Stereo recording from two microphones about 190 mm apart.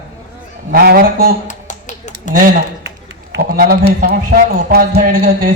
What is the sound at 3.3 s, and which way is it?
A man's voice, 50° right (ahead or behind).